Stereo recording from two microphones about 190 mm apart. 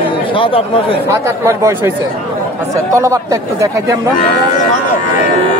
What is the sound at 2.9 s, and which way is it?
A man's voice, 15° right (ahead or behind).